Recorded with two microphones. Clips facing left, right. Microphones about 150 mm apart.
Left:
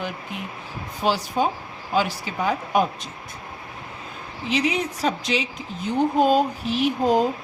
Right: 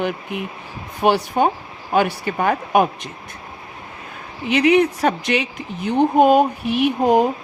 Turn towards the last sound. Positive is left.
turn(degrees=-60)  # may be behind; listen again after turning